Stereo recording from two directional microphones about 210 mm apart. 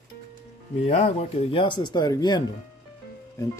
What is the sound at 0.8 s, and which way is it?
Speech, 30° left (ahead or behind).